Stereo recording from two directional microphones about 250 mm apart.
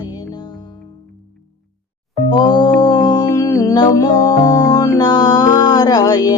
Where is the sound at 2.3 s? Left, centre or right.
Centre.